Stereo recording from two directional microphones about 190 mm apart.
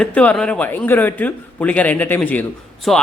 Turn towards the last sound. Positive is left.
turn(degrees=0)  # may be behind; listen again after turning